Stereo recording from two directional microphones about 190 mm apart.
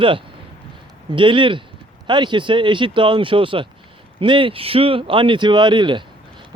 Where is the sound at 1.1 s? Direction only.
25° right (ahead or behind).